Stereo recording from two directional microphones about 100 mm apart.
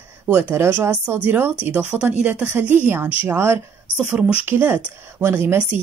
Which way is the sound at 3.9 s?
15° right (ahead or behind).